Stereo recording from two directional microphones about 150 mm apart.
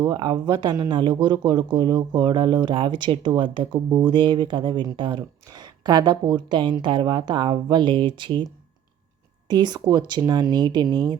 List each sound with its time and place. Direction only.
0.0 s speech: 30° right (ahead or behind)
9.5 s speech: 30° right (ahead or behind)